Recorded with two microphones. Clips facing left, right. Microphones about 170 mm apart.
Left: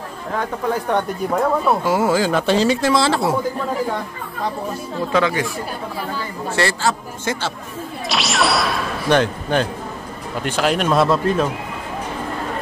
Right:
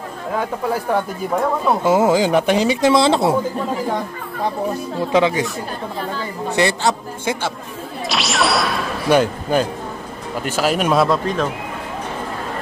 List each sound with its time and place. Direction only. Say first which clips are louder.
0.7 s speech: left 1 dB; 5° right (ahead or behind)
1.9 s speech: right 6 dB; 20° right (ahead or behind)
5.1 s speech: right 2 dB; 20° right (ahead or behind)
6.5 s speech: right 2 dB; 20° right (ahead or behind)
8.1 s speech: even; centre (ahead or behind)